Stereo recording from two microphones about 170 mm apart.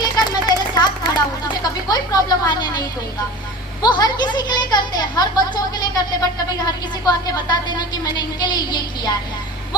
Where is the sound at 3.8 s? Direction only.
25° left (ahead or behind).